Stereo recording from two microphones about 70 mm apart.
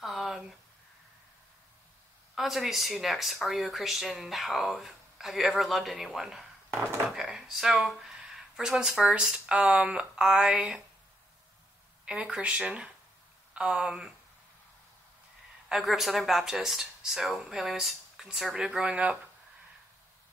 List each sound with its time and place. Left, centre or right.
0.0 s a sound: centre
2.3 s speech: centre
6.7 s speech: right
7.1 s speech: centre
12.1 s speech: centre
15.7 s speech: centre
18.9 s speech: centre